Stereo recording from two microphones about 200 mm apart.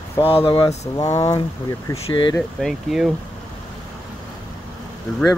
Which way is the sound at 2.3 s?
Centre (ahead or behind).